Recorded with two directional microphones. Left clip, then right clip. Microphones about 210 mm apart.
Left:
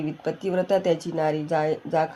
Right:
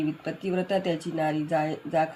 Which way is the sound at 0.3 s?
35° left (ahead or behind).